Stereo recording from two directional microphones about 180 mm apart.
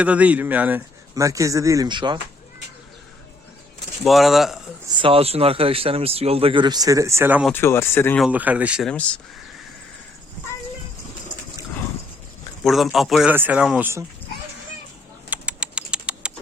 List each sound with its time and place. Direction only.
0.0 s a man's voice: 10° right (ahead or behind); by 2.1 s 25° right (ahead or behind)
4.0 s speech: centre (ahead or behind)
4.9 s speech: 30° right (ahead or behind); by 7.4 s 10° right (ahead or behind)
7.5 s speech: 15° left (ahead or behind)
8.2 s a man's voice: 10° right (ahead or behind)
8.9 s speech: 5° left (ahead or behind)
12.6 s a man's voice: centre (ahead or behind)
15.3 s typing: 5° right (ahead or behind)